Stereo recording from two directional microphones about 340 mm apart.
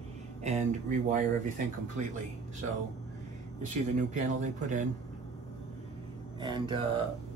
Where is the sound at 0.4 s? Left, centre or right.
Right.